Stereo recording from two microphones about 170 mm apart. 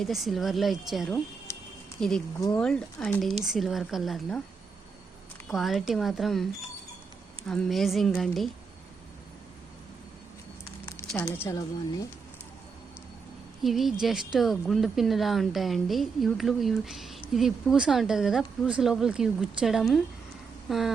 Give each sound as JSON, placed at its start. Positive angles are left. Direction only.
{"t": 0.0, "sound": "a woman's voice", "side_deg": 0}
{"t": 1.5, "sound": "a sound", "side_deg": 15}
{"t": 2.0, "sound": "a woman's voice", "side_deg": 5}
{"t": 3.4, "sound": "a woman's voice", "side_deg": 0}
{"t": 5.5, "sound": "a woman's voice", "side_deg": 0}
{"t": 7.4, "sound": "a woman's voice", "side_deg": 5}
{"t": 11.4, "sound": "speech", "side_deg": 20}
{"t": 13.6, "sound": "a woman's voice", "side_deg": 0}